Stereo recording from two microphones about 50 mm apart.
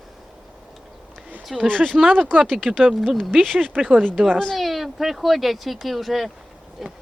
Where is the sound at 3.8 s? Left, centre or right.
Right.